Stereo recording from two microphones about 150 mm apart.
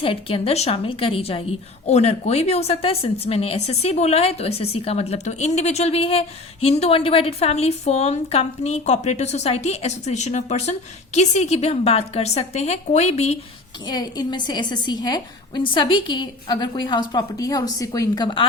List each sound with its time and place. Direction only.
0.0 s a woman's voice: 40° left (ahead or behind)
13.8 s a woman's voice: 25° left (ahead or behind)